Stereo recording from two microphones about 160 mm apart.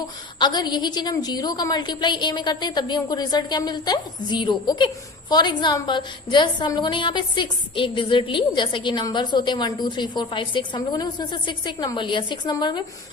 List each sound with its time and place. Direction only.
0.3 s a woman's voice: 25° left (ahead or behind)